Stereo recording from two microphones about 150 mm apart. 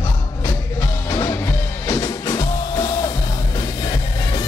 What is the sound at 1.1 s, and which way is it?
Music, 20° left (ahead or behind).